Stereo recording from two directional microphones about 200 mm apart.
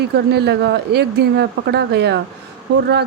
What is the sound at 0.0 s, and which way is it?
Speech, 55° right (ahead or behind).